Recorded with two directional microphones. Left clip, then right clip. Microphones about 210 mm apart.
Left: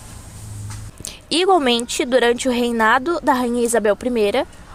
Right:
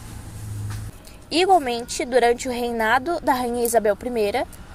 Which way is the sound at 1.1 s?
50° left (ahead or behind).